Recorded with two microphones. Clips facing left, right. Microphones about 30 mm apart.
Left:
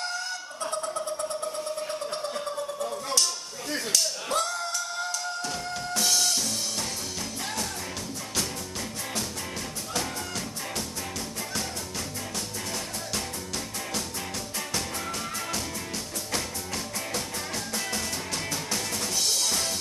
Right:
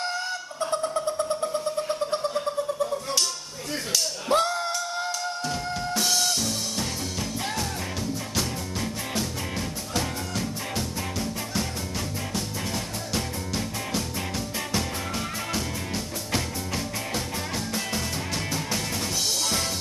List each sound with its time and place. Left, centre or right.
0.0 s chicken: centre
1.4 s vehicle: centre
2.3 s a sound: centre
4.3 s music: right
5.5 s music: centre
16.3 s music: centre